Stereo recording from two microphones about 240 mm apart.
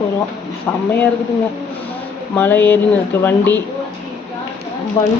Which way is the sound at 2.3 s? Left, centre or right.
Centre.